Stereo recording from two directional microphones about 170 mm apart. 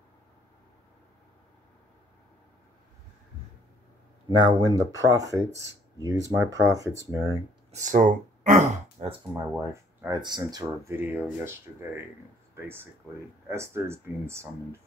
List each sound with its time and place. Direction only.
4.4 s speech: 25° right (ahead or behind)
7.7 s speech: 45° right (ahead or behind)
9.3 s speech: 20° right (ahead or behind)
11.0 s speech: 10° right (ahead or behind)